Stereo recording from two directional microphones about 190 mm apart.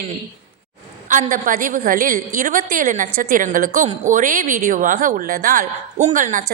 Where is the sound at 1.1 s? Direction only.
45° right (ahead or behind).